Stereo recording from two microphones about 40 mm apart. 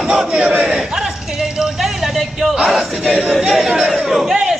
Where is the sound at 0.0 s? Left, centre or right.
Right.